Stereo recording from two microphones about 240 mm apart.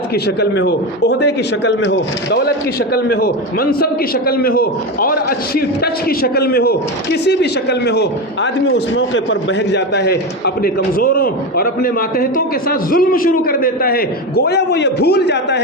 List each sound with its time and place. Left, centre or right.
0.1 s a man's voice: left